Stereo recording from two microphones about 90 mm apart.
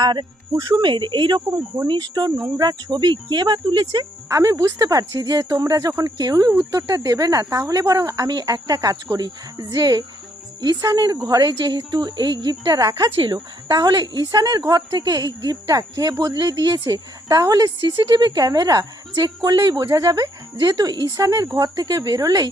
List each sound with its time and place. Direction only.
0.0 s speech: 55° right (ahead or behind)
1.5 s speech: 35° right (ahead or behind)
1.9 s speech: 55° right (ahead or behind)
4.3 s a woman's voice: 40° right (ahead or behind)
13.1 s speech: 75° right (ahead or behind)
13.3 s a woman's voice: 50° right (ahead or behind)
17.7 s a woman's voice: 55° right (ahead or behind)